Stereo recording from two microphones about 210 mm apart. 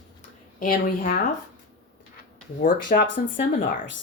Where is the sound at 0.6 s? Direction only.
40° left (ahead or behind).